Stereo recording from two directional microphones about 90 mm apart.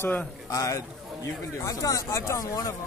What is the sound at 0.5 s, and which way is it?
Speech, 35° left (ahead or behind).